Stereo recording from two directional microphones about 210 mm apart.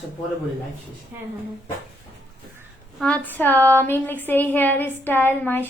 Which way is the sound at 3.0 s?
5° left (ahead or behind).